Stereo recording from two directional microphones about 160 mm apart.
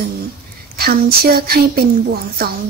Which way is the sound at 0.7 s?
70° right (ahead or behind).